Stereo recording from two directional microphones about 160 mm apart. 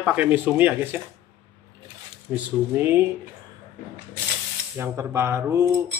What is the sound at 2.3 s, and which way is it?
Speech, 15° right (ahead or behind).